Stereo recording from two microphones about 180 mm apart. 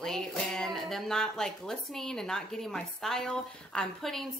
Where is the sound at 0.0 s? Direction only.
Centre (ahead or behind).